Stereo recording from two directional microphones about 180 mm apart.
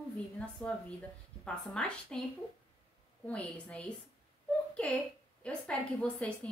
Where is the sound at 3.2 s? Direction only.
5° left (ahead or behind).